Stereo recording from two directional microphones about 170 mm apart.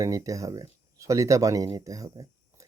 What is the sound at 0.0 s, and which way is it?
Speech, 20° right (ahead or behind).